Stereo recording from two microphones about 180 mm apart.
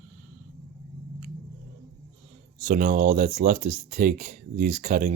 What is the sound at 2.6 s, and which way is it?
Speech, 50° right (ahead or behind).